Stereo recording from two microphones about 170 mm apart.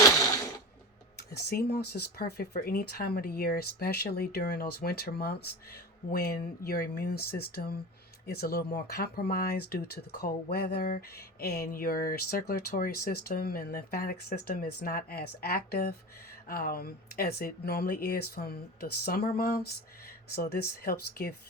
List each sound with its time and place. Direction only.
1.5 s speech: 70° left (ahead or behind)